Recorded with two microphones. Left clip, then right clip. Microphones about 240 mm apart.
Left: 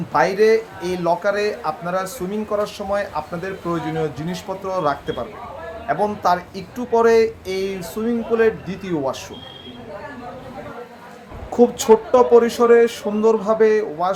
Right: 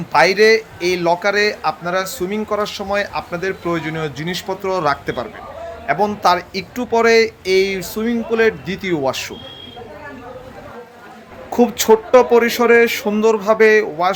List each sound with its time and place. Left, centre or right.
0.1 s speech: right
11.5 s speech: right